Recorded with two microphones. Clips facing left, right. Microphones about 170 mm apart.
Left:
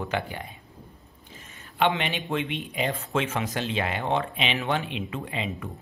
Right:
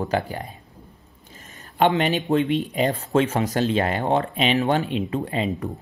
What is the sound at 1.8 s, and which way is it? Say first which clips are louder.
Speech: right 6 dB; 40° right (ahead or behind).